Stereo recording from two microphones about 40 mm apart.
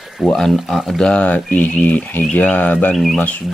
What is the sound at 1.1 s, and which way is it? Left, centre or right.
Speech, left.